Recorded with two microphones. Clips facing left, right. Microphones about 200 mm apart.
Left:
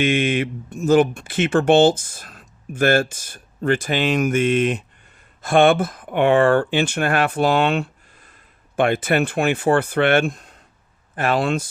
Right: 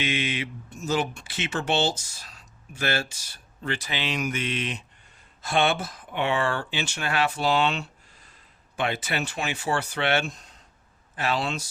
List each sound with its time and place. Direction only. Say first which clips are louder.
0.0 s speech: left 10 dB; 50° left (ahead or behind)